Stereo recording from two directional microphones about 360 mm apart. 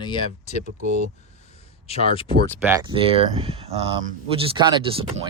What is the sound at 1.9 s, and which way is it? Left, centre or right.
Speech, centre.